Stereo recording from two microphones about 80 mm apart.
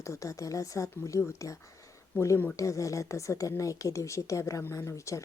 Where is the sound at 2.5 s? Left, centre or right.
Left.